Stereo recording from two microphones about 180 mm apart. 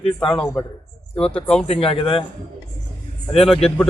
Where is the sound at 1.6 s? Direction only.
30° left (ahead or behind).